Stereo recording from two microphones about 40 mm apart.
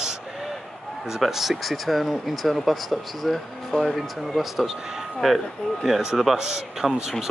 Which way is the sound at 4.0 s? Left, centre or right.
Centre.